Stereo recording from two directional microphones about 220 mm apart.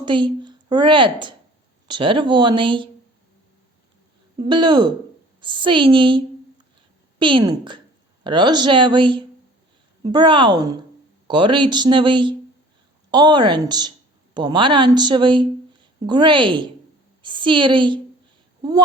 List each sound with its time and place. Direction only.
0.0 s a woman's voice: 20° right (ahead or behind)
4.4 s a woman's voice: 20° right (ahead or behind)